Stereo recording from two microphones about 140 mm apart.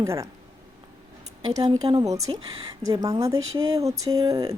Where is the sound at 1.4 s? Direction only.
25° right (ahead or behind).